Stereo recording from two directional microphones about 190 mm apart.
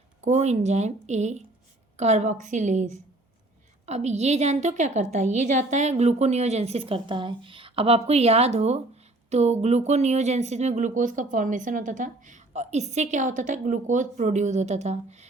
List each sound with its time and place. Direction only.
0.2 s speech: 35° right (ahead or behind)